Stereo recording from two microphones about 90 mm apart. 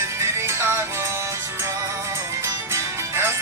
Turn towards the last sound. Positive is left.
turn(degrees=-30)  # may be behind; listen again after turning